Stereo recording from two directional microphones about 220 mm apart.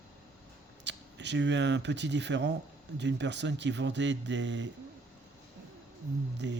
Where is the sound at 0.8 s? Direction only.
50° right (ahead or behind).